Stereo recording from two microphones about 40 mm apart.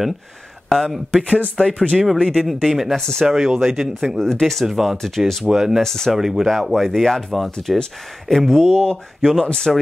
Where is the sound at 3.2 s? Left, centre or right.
Centre.